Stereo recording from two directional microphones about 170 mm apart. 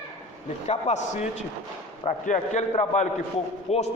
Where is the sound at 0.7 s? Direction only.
40° left (ahead or behind).